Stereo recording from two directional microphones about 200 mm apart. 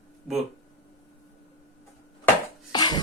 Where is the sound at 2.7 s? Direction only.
20° left (ahead or behind).